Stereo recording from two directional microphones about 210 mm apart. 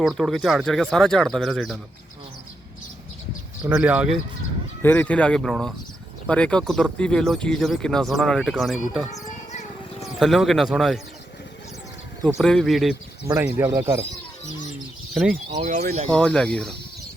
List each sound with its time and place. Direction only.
0.0 s speech: centre (ahead or behind)
3.6 s speech: 5° right (ahead or behind)
4.8 s speech: 10° left (ahead or behind)
10.2 s speech: centre (ahead or behind)
12.2 s speech: centre (ahead or behind)
13.2 s speech: 10° right (ahead or behind)
15.1 s speech: centre (ahead or behind)
15.4 s speech: 30° right (ahead or behind)
16.0 s speech: 5° left (ahead or behind)